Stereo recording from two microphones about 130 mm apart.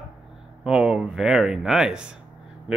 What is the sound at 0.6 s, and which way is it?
Speech, 5° right (ahead or behind).